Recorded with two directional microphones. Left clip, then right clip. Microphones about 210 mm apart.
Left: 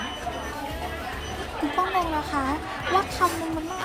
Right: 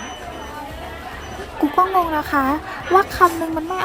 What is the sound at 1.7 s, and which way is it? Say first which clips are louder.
Speech: right 8 dB; 25° right (ahead or behind).